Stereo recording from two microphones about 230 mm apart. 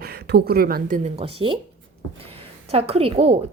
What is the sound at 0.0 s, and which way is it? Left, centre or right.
Speech, right.